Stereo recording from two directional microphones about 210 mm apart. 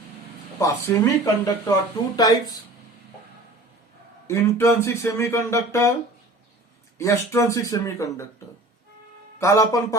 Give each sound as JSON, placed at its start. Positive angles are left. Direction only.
{"t": 0.6, "sound": "speech", "side_deg": 15}
{"t": 4.3, "sound": "speech", "side_deg": 10}
{"t": 7.0, "sound": "speech", "side_deg": 15}
{"t": 9.4, "sound": "speech", "side_deg": 15}